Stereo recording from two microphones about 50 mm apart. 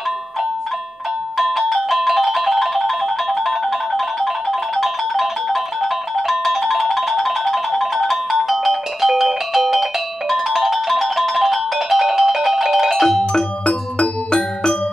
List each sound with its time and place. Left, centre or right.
1.4 s music: centre
13.2 s music: centre